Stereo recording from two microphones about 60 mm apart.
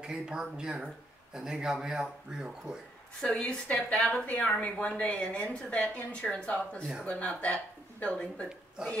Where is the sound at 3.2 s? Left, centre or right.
Centre.